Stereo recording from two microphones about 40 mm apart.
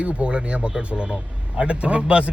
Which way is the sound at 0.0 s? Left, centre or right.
Right.